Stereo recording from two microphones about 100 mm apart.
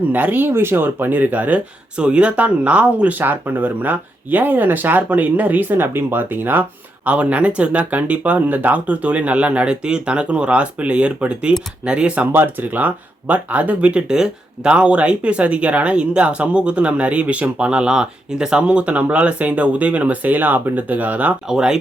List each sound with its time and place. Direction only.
0.1 s speech: 20° right (ahead or behind)